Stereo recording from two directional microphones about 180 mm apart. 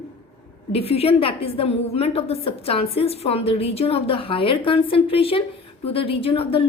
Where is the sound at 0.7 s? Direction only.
35° left (ahead or behind).